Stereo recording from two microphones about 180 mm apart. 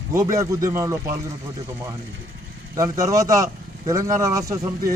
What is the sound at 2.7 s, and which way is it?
Speech, 20° right (ahead or behind).